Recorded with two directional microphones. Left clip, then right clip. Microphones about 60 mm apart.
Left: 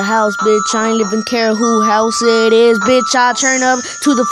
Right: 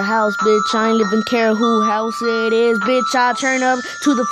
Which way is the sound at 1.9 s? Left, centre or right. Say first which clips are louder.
Left 7 dB; left.